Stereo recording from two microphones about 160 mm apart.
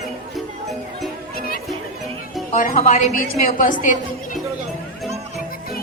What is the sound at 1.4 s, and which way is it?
Chatter, 70° left (ahead or behind).